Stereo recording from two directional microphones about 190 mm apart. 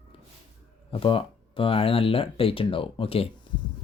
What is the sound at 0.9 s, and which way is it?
Speech, 30° left (ahead or behind).